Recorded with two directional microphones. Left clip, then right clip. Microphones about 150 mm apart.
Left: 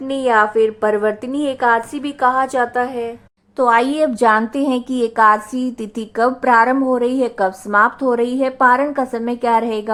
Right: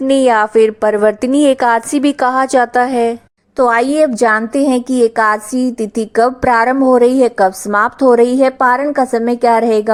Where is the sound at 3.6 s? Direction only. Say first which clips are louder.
Right 3 dB; 25° right (ahead or behind).